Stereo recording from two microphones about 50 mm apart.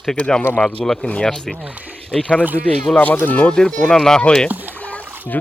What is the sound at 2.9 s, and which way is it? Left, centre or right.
Speech, left.